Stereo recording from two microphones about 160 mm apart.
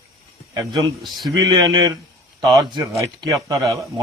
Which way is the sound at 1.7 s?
25° right (ahead or behind).